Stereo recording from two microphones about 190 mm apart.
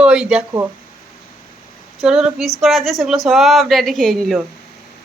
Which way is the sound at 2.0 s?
5° right (ahead or behind).